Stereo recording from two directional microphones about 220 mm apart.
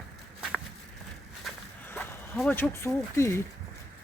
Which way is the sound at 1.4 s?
5° left (ahead or behind).